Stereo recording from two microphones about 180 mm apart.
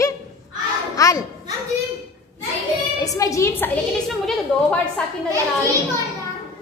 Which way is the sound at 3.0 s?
20° left (ahead or behind).